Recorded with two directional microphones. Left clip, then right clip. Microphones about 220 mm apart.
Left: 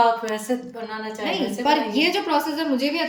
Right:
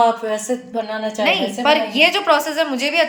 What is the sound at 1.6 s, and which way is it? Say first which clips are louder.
A woman's voice: right 6 dB; 5° left (ahead or behind).